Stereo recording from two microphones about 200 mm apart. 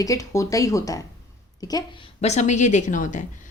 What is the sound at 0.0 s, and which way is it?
Speech, 15° left (ahead or behind).